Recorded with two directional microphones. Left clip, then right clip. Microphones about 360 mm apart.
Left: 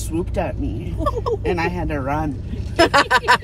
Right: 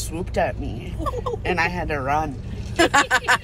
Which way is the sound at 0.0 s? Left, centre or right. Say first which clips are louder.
Even; right.